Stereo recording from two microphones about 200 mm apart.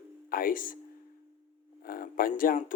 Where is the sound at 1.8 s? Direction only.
45° left (ahead or behind).